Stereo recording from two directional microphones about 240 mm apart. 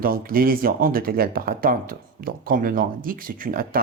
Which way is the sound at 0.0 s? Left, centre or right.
Right.